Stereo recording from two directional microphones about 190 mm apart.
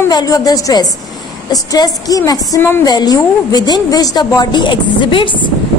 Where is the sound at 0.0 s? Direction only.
20° left (ahead or behind).